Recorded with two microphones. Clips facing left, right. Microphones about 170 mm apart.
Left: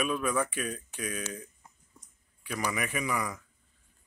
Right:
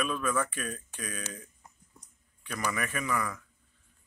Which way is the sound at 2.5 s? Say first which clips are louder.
Left 1 dB; 10° left (ahead or behind).